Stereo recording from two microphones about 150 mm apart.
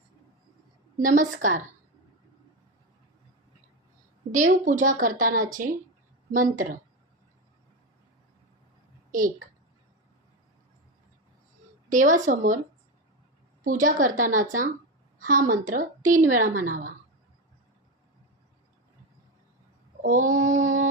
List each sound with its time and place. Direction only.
0.9 s speech: 60° right (ahead or behind)
4.3 s speech: 55° right (ahead or behind)
11.9 s speech: 60° right (ahead or behind)
13.7 s a woman's voice: 60° right (ahead or behind)
20.0 s speech: 60° right (ahead or behind)